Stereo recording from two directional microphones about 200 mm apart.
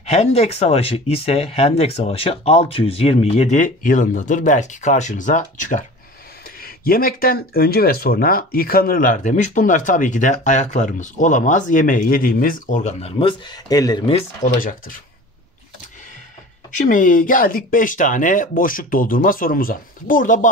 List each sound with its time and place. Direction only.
0.0 s speech: 30° left (ahead or behind)
14.4 s speech: 40° left (ahead or behind)
16.8 s speech: 40° left (ahead or behind)